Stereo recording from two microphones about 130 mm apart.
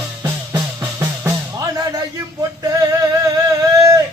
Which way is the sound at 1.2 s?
30° right (ahead or behind).